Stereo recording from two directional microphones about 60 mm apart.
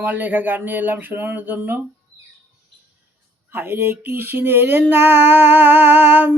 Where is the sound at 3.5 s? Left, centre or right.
Right.